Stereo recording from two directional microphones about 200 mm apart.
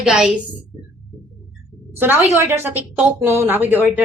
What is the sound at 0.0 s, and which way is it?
Speech, 5° right (ahead or behind).